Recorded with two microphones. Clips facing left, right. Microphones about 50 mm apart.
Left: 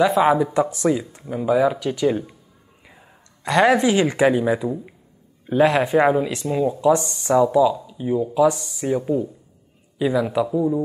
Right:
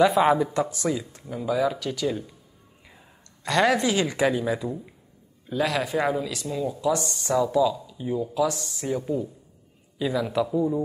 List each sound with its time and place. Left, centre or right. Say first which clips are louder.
0.0 s speech: left 3 dB; centre
0.5 s speech: left 6 dB; left
2.9 s speech: left 4 dB; centre
10.3 s speech: left 4 dB; centre